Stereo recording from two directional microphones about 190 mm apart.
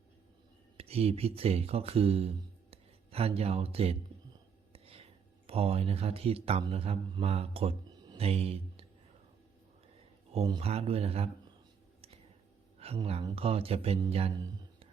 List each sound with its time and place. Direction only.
0.8 s speech: 30° right (ahead or behind)
4.7 s whispering: 30° right (ahead or behind)
5.5 s speech: 30° right (ahead or behind)
10.3 s speech: 30° right (ahead or behind)
12.8 s speech: 30° right (ahead or behind)